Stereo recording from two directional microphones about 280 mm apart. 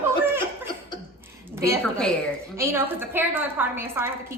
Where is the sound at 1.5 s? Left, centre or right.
Centre.